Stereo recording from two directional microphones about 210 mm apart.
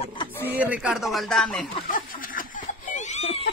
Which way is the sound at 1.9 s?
40° left (ahead or behind).